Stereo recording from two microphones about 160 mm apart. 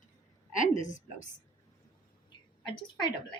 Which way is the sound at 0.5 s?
50° left (ahead or behind).